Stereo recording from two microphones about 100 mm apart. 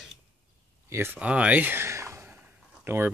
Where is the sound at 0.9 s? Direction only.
25° right (ahead or behind).